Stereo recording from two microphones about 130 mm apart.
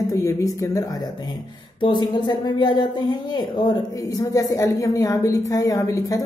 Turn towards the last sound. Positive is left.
turn(degrees=25)  # may be behind; listen again after turning